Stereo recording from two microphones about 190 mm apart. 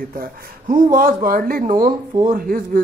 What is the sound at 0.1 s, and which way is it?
Speech, 50° right (ahead or behind).